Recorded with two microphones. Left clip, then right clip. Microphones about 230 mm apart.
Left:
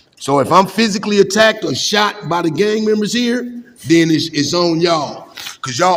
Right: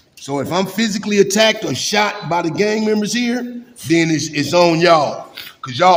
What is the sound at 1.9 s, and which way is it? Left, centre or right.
A man's voice, centre.